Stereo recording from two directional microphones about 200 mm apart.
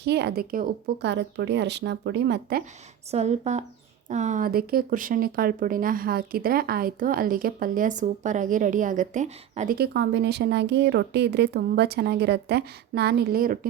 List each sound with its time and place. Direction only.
0.0 s speech: 55° right (ahead or behind)
3.1 s speech: 35° right (ahead or behind)
9.7 s speech: 55° right (ahead or behind)